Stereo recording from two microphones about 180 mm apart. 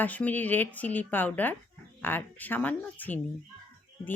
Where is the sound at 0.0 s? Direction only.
10° left (ahead or behind).